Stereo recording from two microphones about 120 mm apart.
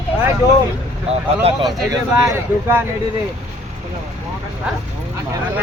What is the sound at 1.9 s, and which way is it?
Speech, 25° right (ahead or behind).